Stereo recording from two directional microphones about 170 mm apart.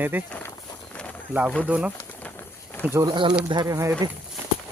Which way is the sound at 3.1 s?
30° right (ahead or behind).